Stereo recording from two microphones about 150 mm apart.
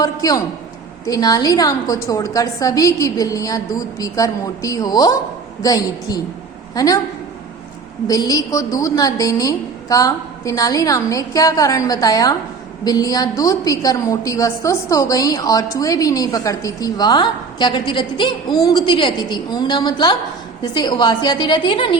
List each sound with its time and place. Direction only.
0.0 s a woman's voice: 25° left (ahead or behind)
8.0 s a woman's voice: 25° left (ahead or behind)